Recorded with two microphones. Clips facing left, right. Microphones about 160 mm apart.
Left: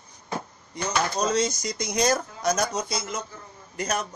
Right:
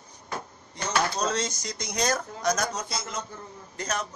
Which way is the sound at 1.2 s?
10° left (ahead or behind).